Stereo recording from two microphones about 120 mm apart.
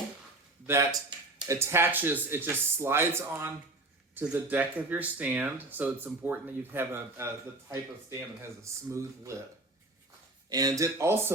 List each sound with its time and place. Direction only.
0.7 s speech: 30° right (ahead or behind)
8.4 s speech: 25° right (ahead or behind)
10.5 s speech: 30° right (ahead or behind)